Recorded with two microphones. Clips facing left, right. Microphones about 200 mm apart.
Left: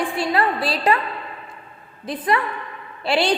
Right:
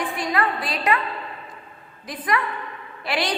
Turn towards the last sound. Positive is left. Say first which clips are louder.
# left 6 dB
turn(degrees=30)  # may be behind; listen again after turning